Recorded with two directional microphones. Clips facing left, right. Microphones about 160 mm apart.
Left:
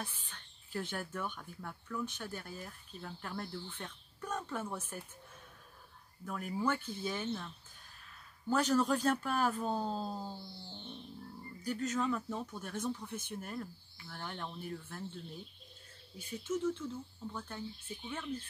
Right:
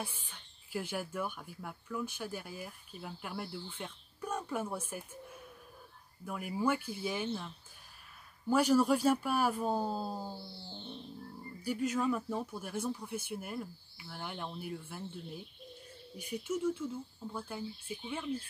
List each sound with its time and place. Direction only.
0.0 s speech: 10° right (ahead or behind)
6.2 s speech: 10° right (ahead or behind)
10.4 s music: 20° left (ahead or behind)
10.7 s speech: 20° right (ahead or behind)